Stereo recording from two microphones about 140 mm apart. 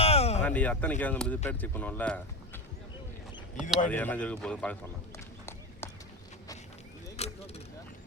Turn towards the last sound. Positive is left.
turn(degrees=50)  # may be behind; listen again after turning